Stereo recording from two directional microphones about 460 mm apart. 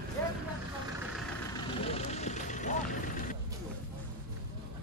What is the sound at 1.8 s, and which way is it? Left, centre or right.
Vehicle, centre.